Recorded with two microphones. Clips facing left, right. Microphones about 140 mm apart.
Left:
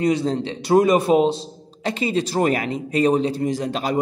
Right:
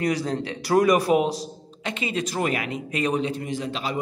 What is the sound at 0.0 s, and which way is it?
A man's voice, 25° left (ahead or behind).